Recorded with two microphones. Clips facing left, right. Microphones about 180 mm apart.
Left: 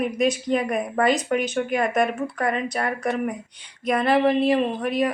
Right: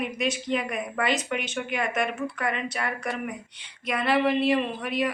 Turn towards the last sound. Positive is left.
turn(degrees=40)  # may be behind; listen again after turning